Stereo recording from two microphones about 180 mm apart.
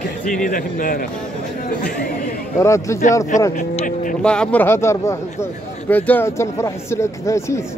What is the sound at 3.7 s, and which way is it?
Speech, 50° left (ahead or behind).